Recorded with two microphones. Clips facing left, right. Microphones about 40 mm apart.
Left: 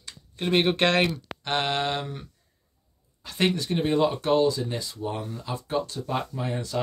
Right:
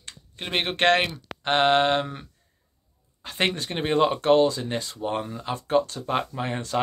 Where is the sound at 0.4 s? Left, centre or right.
Right.